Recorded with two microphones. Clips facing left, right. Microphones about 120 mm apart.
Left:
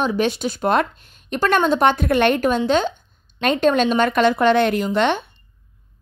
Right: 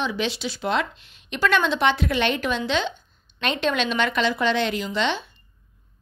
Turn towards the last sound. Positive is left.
turn(degrees=55)  # may be behind; listen again after turning